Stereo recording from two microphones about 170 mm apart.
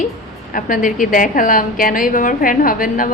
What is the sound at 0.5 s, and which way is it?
A woman's voice, 55° left (ahead or behind).